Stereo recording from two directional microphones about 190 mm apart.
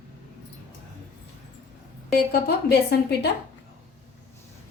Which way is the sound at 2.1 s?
55° left (ahead or behind).